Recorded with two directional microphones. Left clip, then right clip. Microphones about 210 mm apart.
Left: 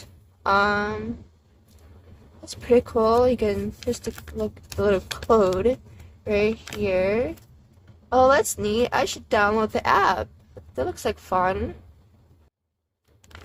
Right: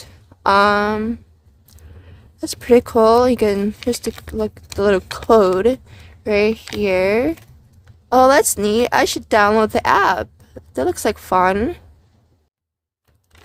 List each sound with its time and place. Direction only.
0.0 s a sound: 40° right (ahead or behind)
2.4 s speech: 40° right (ahead or behind)
4.8 s a woman's voice: 40° right (ahead or behind)